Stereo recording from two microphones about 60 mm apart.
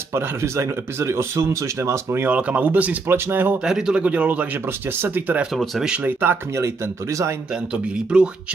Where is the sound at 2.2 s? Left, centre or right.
Right.